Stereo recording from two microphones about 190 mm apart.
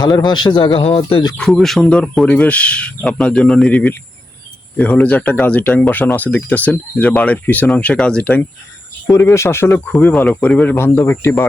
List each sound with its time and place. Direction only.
0.0 s speech: 20° left (ahead or behind)
1.4 s a man's voice: centre (ahead or behind)